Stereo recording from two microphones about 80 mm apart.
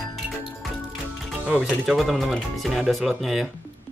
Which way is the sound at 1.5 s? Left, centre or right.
Centre.